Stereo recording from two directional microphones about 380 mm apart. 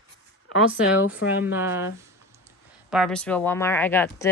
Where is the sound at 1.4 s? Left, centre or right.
Centre.